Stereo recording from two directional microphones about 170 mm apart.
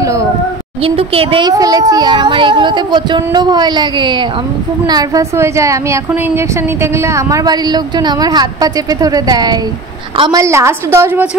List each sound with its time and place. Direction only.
0.8 s speech: 35° right (ahead or behind)
1.5 s a woman's voice: 20° right (ahead or behind)
10.4 s a woman's voice: 15° right (ahead or behind)